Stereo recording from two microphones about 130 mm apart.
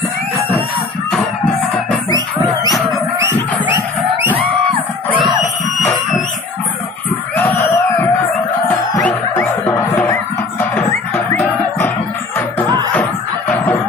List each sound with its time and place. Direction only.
4.7 s crowd: 40° right (ahead or behind)
7.3 s crowd: 15° left (ahead or behind)
8.6 s music: 5° left (ahead or behind)
9.7 s music: 15° left (ahead or behind)
12.6 s music: 30° right (ahead or behind)